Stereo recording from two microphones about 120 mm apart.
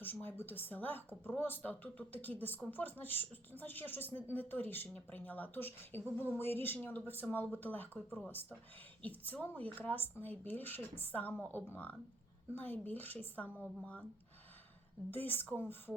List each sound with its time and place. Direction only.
0.0 s speech: 15° left (ahead or behind)
15.1 s speech: 15° left (ahead or behind)